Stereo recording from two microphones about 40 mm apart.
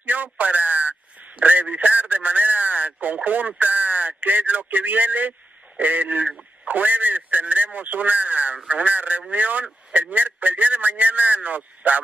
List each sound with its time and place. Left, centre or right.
0.0 s radio: right
1.4 s a sound: right
3.2 s a man's voice: right